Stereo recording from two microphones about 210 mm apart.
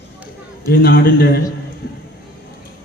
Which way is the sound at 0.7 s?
45° left (ahead or behind).